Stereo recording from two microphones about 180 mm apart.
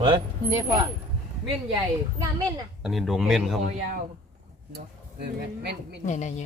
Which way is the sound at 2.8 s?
Centre (ahead or behind).